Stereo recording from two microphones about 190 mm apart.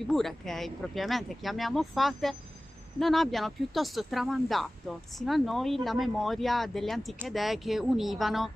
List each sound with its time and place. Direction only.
0.1 s speech: centre (ahead or behind)